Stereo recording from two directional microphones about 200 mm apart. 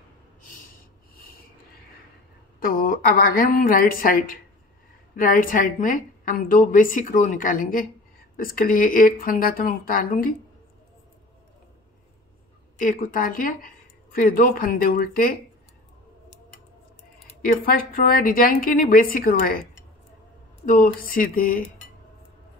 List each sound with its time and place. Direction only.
2.6 s a woman's voice: 45° left (ahead or behind)
12.7 s a woman's voice: 40° left (ahead or behind)
17.5 s a woman's voice: 45° left (ahead or behind)
20.7 s a woman's voice: 45° left (ahead or behind)